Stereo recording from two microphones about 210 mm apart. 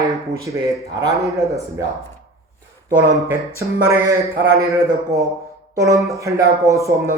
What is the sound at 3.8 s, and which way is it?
Speech, 15° right (ahead or behind).